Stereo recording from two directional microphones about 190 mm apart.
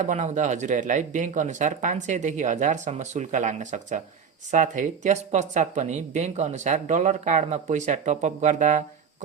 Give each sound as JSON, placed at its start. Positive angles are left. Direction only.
{"t": 0.0, "sound": "speech", "side_deg": -40}